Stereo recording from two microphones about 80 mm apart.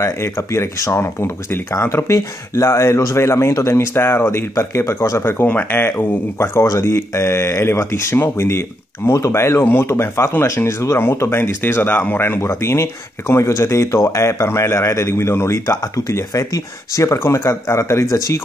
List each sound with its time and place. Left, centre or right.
0.0 s speech: left
5.2 s speech: left
6.6 s speech: left
12.4 s speech: left